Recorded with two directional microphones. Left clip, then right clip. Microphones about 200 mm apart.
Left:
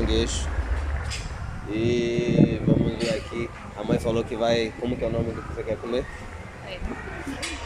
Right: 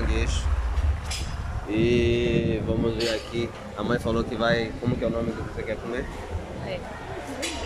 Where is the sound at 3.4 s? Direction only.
5° left (ahead or behind).